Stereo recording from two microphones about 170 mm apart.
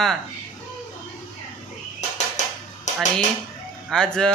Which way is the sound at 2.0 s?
45° left (ahead or behind).